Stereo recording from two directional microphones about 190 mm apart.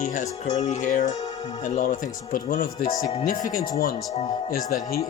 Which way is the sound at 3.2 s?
45° left (ahead or behind).